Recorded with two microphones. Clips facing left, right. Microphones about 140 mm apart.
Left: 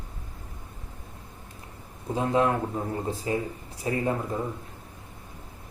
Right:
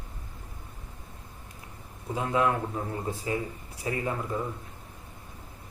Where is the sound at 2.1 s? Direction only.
30° left (ahead or behind).